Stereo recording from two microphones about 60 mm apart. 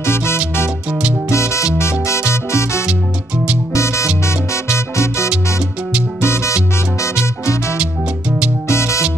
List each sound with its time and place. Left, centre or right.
0.0 s music: left
8.6 s music: left